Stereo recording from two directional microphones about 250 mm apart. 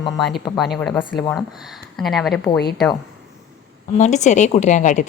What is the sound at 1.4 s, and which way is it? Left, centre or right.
A woman's voice, centre.